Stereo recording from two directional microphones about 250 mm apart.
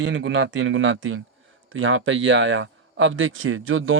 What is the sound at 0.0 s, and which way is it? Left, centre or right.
Speech, right.